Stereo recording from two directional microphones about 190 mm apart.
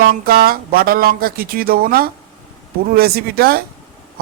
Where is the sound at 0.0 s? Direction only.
50° right (ahead or behind).